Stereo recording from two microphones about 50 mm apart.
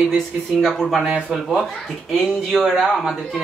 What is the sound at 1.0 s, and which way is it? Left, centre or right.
Speech, right.